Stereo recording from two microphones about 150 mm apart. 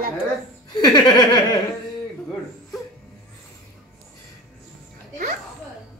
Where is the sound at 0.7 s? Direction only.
25° left (ahead or behind).